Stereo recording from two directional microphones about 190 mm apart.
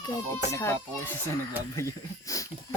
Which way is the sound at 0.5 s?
15° left (ahead or behind).